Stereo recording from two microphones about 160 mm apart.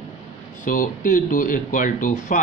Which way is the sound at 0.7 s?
55° left (ahead or behind).